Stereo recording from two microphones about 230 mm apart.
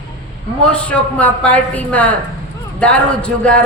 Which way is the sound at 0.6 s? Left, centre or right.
Centre.